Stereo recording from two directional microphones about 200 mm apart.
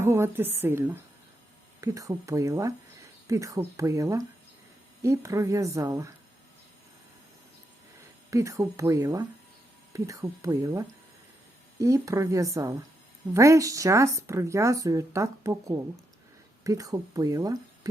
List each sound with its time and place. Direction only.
0.0 s speech: 10° right (ahead or behind)
8.3 s speech: 15° right (ahead or behind)